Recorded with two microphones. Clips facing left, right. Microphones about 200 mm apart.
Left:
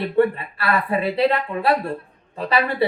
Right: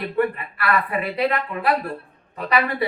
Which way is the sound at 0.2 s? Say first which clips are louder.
Left 4 dB; 30° left (ahead or behind).